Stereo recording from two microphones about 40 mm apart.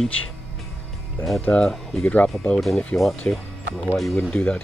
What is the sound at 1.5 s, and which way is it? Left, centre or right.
Speech, left.